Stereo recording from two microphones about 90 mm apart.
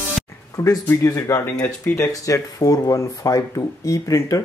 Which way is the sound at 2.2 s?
40° left (ahead or behind).